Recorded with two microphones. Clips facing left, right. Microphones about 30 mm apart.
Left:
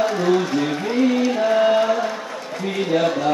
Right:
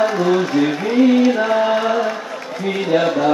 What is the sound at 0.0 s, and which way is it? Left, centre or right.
Music, centre.